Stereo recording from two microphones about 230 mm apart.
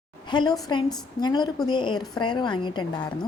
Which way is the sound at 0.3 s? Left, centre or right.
Centre.